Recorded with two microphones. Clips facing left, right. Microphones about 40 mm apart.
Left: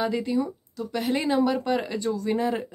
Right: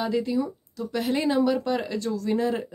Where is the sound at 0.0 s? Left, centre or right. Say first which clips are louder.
Even; centre.